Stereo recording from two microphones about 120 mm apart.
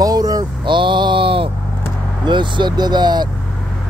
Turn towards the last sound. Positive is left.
turn(degrees=-35)  # may be behind; listen again after turning